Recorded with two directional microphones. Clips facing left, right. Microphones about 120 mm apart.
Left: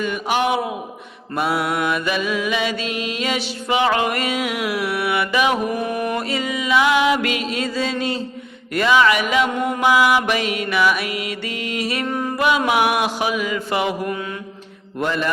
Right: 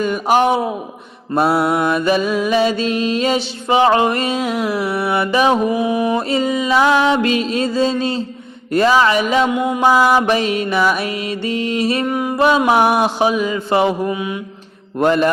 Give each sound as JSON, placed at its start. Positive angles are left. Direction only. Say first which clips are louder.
{"t": 0.0, "sound": "mantra", "louder": "right 6 dB", "side_deg": -40}
{"t": 5.7, "sound": "music", "louder": "right 6 dB", "side_deg": -10}
{"t": 6.1, "sound": "music", "louder": "right 6 dB", "side_deg": -30}
{"t": 8.7, "sound": "mantra", "louder": "right 3 dB", "side_deg": -35}
{"t": 9.5, "sound": "music", "louder": "right 4 dB", "side_deg": -10}
{"t": 9.8, "sound": "mantra", "louder": "right 3 dB", "side_deg": -35}
{"t": 12.0, "sound": "music", "louder": "right 4 dB", "side_deg": -10}
{"t": 12.4, "sound": "music", "louder": "right 5 dB", "side_deg": -30}
{"t": 14.1, "sound": "music", "louder": "right 4 dB", "side_deg": -15}
{"t": 14.9, "sound": "mantra", "louder": "right 8 dB", "side_deg": -45}